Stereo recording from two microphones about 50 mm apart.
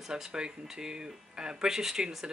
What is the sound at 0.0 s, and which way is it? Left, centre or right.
Speech, centre.